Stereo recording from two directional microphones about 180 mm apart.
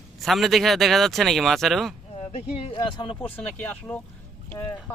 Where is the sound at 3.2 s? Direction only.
10° left (ahead or behind).